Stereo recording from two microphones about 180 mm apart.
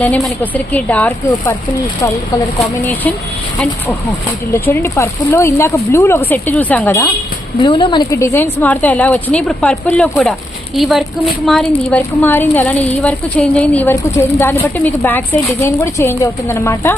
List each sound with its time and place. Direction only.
0.0 s a woman's voice: 10° left (ahead or behind)
2.6 s a woman's voice: 10° left (ahead or behind)
4.5 s a woman's voice: 10° left (ahead or behind)
7.6 s a woman's voice: 25° left (ahead or behind)